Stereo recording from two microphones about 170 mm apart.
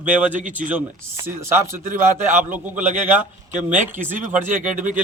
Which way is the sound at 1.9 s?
50° right (ahead or behind).